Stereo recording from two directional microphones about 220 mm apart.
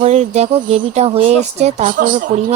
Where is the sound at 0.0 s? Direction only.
30° right (ahead or behind).